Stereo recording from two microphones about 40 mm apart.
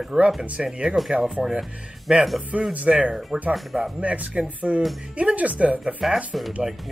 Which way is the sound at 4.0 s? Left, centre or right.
Right.